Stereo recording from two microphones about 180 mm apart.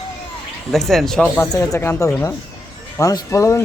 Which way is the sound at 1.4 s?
15° left (ahead or behind).